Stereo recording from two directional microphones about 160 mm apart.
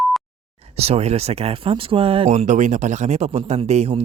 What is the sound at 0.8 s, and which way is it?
Speech, 40° right (ahead or behind).